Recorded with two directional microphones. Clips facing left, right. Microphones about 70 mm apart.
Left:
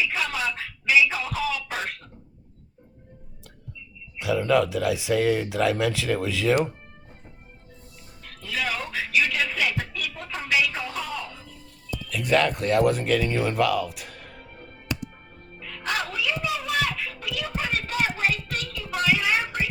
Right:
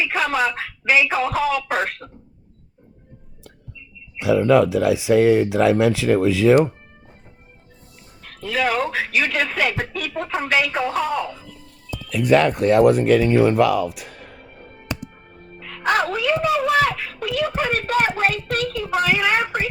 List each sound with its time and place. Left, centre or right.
0.0 s speech: right
4.2 s speech: right
8.2 s speech: right
11.9 s speech: right
14.9 s music: right
15.6 s speech: right